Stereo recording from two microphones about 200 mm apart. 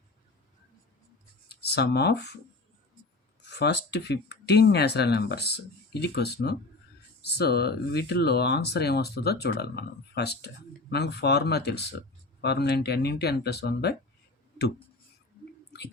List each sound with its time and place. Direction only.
1.5 s speech: 55° left (ahead or behind)
3.5 s speech: 55° left (ahead or behind)
15.7 s speech: 55° left (ahead or behind)